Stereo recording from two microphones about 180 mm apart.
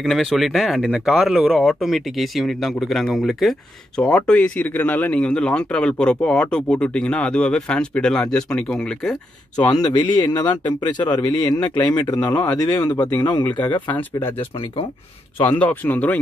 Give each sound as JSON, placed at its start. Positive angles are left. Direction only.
{"t": 0.0, "sound": "speech", "side_deg": 0}
{"t": 9.7, "sound": "speech", "side_deg": 25}
{"t": 13.8, "sound": "speech", "side_deg": 10}
{"t": 15.4, "sound": "speech", "side_deg": 10}